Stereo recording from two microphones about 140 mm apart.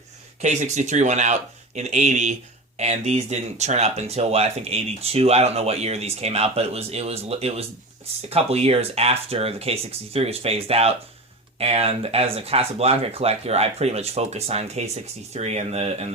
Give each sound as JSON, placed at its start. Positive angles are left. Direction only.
{"t": 0.4, "sound": "speech", "side_deg": -60}